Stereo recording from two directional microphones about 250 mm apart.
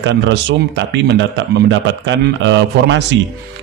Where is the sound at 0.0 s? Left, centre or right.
Right.